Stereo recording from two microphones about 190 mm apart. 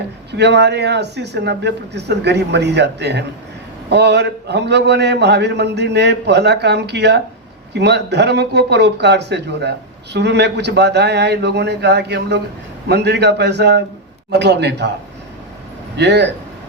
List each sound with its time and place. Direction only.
0.3 s speech: 65° right (ahead or behind)
16.0 s speech: 65° right (ahead or behind)